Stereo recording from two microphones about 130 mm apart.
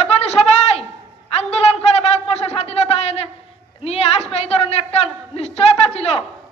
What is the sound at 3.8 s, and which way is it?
A woman's voice, 50° left (ahead or behind).